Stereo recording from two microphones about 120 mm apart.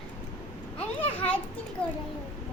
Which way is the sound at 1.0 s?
15° left (ahead or behind).